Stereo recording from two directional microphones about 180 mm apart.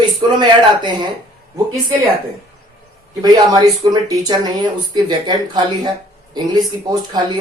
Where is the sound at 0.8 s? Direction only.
25° right (ahead or behind).